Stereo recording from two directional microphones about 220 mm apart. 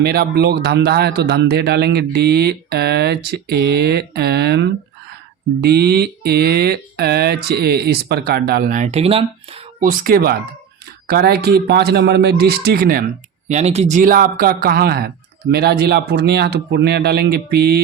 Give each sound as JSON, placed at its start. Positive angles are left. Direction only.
{"t": 0.0, "sound": "speech", "side_deg": -45}
{"t": 9.8, "sound": "speech", "side_deg": -40}
{"t": 13.5, "sound": "speech", "side_deg": -30}